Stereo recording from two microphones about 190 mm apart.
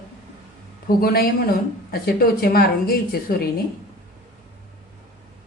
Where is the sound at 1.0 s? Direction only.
50° left (ahead or behind).